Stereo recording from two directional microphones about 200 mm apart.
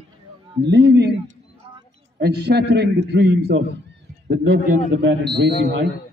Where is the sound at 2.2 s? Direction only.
55° right (ahead or behind).